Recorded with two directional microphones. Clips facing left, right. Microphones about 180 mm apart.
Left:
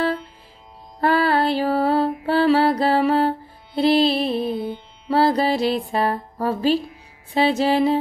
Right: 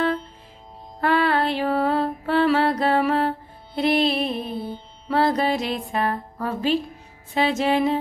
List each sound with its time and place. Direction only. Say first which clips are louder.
1.0 s music: left 2 dB; 35° left (ahead or behind)
4.6 s music: left 3 dB; 30° right (ahead or behind)
5.0 s music: left 3 dB; 30° left (ahead or behind)